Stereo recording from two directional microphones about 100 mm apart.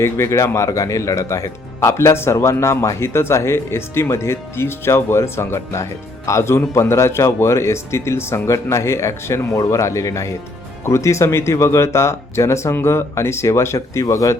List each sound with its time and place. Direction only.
0.0 s speech: 30° left (ahead or behind)